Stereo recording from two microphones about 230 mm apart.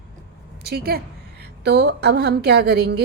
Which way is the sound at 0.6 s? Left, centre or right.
Right.